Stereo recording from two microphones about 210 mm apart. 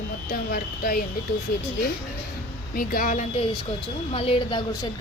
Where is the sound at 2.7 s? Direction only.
45° left (ahead or behind).